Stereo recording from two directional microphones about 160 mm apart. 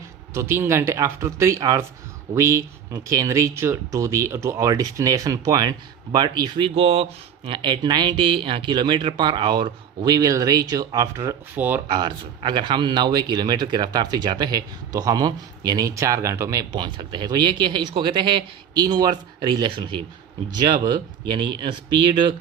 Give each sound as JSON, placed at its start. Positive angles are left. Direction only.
{"t": 0.3, "sound": "speech", "side_deg": -15}
{"t": 6.7, "sound": "speech", "side_deg": -40}
{"t": 11.9, "sound": "speech", "side_deg": -25}